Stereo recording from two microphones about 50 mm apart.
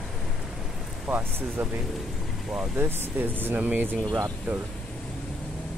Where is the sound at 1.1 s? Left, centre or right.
Centre.